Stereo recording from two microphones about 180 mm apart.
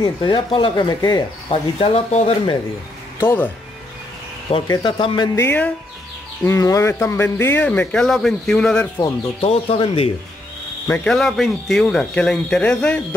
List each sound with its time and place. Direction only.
0.0 s speech: 25° left (ahead or behind)
3.2 s speech: 15° left (ahead or behind)
4.6 s speech: 25° left (ahead or behind)
5.3 s speech: 10° left (ahead or behind)
9.4 s speech: 35° left (ahead or behind)
10.9 s speech: 5° left (ahead or behind)